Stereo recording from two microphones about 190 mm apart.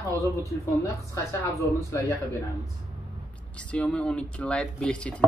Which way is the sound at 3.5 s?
5° left (ahead or behind).